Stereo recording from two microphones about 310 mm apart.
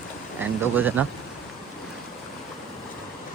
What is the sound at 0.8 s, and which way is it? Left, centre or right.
Speech, centre.